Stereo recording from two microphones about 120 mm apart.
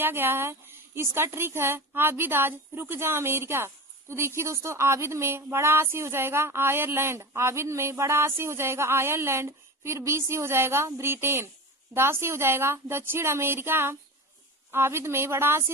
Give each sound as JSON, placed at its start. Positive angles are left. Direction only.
{"t": 0.0, "sound": "speech", "side_deg": -20}